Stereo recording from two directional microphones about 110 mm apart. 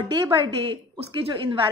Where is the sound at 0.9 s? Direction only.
55° right (ahead or behind).